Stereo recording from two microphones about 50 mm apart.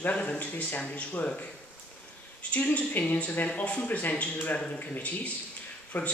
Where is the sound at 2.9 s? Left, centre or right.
Left.